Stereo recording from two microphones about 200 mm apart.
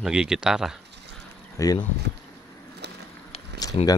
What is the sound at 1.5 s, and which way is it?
Speech, 15° left (ahead or behind).